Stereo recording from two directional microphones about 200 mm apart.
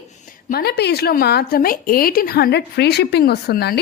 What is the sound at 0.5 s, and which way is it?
A woman's voice, 55° left (ahead or behind).